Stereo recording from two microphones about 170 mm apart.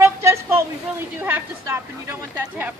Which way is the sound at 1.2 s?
15° right (ahead or behind).